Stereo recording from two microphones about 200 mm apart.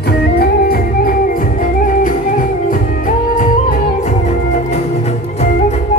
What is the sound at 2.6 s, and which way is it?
Music, 40° left (ahead or behind).